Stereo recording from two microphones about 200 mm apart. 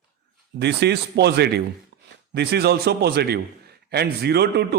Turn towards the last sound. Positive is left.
turn(degrees=-55)  # may be behind; listen again after turning